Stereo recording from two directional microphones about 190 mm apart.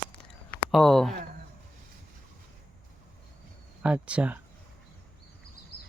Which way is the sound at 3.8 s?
5° right (ahead or behind).